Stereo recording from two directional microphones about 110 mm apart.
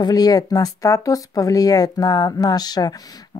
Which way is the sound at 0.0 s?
35° left (ahead or behind).